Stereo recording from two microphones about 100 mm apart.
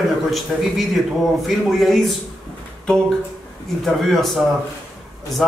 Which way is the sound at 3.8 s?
Centre (ahead or behind).